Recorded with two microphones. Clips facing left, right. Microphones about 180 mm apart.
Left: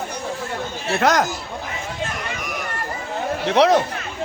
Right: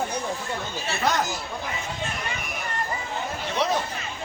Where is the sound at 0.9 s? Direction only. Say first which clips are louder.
Left 7 dB; 90° left.